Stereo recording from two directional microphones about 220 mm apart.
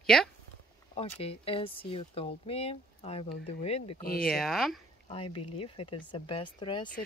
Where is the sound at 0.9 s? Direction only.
25° left (ahead or behind).